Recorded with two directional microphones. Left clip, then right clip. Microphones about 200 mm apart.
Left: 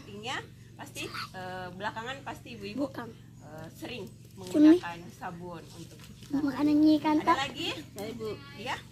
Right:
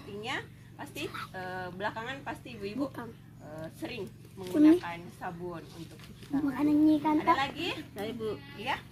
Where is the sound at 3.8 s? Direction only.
15° right (ahead or behind).